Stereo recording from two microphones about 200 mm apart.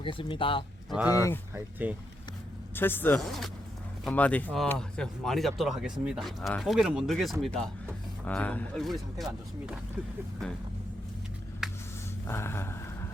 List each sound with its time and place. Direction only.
0.0 s speech: 25° left (ahead or behind)
0.9 s speech: 5° right (ahead or behind)
1.1 s speech: 15° left (ahead or behind)
1.5 s speech: 10° right (ahead or behind)
2.7 s speech: 10° left (ahead or behind)
11.6 s a sound: centre (ahead or behind)
12.3 s a sound: 10° left (ahead or behind)